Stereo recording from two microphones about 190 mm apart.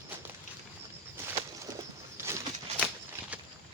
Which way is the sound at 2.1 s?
15° right (ahead or behind).